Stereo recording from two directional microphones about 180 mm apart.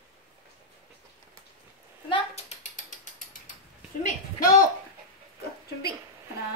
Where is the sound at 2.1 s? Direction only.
40° left (ahead or behind).